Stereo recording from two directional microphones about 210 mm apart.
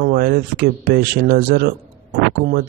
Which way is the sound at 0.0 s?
45° right (ahead or behind).